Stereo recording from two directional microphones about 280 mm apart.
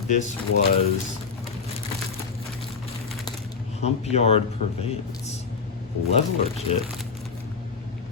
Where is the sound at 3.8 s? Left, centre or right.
Left.